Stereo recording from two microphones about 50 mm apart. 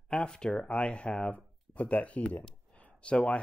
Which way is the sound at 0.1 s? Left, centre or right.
Centre.